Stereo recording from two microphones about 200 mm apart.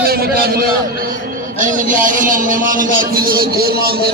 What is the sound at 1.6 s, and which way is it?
A man's voice, 40° right (ahead or behind).